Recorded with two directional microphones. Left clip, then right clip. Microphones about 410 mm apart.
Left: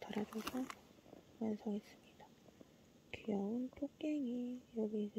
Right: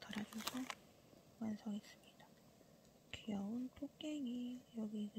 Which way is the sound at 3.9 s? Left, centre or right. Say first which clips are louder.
Left 5 dB; right.